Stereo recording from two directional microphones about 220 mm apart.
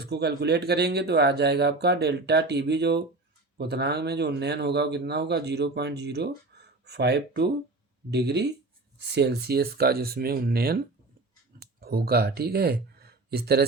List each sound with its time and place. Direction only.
0.0 s speech: 50° right (ahead or behind)